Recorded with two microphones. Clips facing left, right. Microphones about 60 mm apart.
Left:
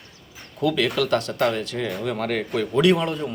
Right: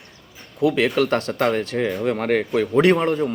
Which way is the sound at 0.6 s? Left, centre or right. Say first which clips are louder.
Right 3 dB; right.